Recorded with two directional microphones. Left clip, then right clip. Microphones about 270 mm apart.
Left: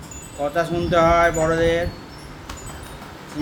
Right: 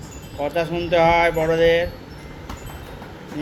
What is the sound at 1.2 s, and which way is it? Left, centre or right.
Speech, centre.